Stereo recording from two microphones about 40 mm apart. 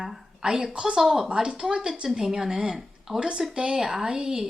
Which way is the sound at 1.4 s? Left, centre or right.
Right.